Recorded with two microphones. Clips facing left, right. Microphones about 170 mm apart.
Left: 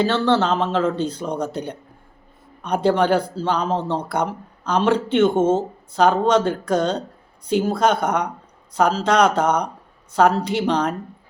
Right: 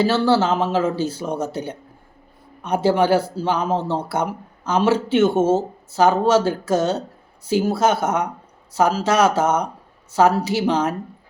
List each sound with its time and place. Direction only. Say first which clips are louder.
0.0 s speech: right 1 dB; 10° right (ahead or behind)